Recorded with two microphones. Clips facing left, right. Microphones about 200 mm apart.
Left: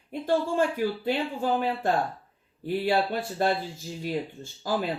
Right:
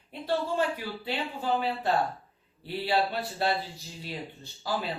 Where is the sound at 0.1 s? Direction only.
50° left (ahead or behind).